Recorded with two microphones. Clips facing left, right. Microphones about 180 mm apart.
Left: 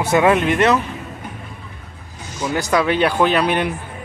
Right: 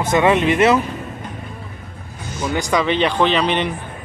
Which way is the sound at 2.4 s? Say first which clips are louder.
Left 1 dB; 5° left (ahead or behind).